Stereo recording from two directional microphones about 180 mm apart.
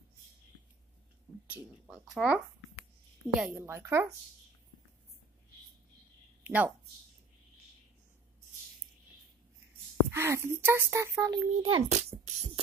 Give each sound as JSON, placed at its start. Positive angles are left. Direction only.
{"t": 1.5, "sound": "a child's voice", "side_deg": 0}
{"t": 6.4, "sound": "a woman's voice", "side_deg": -10}
{"t": 10.1, "sound": "a child's voice", "side_deg": -15}
{"t": 11.9, "sound": "beatboxing", "side_deg": -40}